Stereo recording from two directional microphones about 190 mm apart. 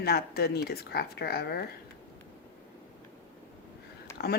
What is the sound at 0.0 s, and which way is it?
Speech, 55° left (ahead or behind).